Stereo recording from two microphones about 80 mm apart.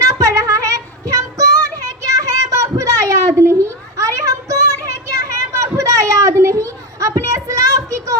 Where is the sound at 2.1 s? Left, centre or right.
Right.